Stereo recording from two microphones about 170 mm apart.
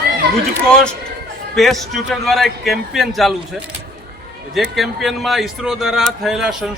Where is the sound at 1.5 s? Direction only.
Centre (ahead or behind).